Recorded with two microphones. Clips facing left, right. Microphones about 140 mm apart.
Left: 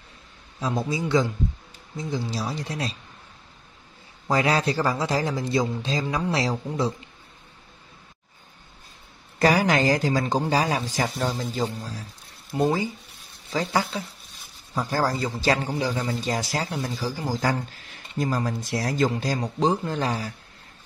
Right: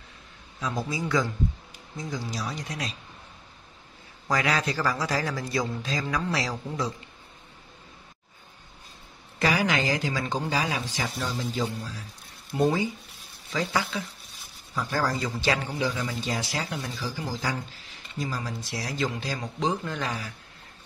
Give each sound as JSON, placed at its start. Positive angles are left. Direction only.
{"t": 0.6, "sound": "a man's voice", "side_deg": 30}
{"t": 4.3, "sound": "a man's voice", "side_deg": 30}
{"t": 9.4, "sound": "a man's voice", "side_deg": 40}
{"t": 12.5, "sound": "a man's voice", "side_deg": 25}
{"t": 13.5, "sound": "a man's voice", "side_deg": 35}